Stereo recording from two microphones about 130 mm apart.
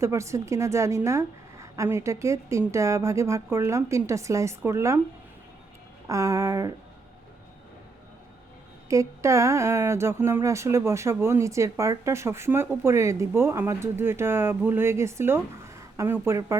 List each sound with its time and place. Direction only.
0.0 s speech: 20° right (ahead or behind)
6.1 s speech: 25° right (ahead or behind)
8.9 s speech: 25° right (ahead or behind)